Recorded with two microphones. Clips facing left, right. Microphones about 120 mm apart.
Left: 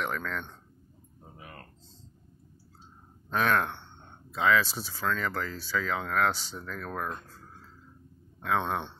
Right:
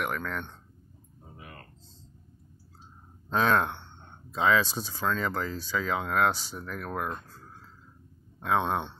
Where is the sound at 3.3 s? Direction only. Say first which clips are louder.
Right 2 dB; 25° right (ahead or behind).